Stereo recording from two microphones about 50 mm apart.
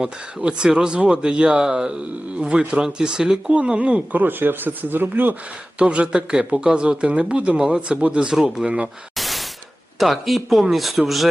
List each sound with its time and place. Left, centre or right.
0.0 s speech: centre
3.5 s speech: right
5.8 s speech: right
9.1 s a sound: centre
10.0 s speech: centre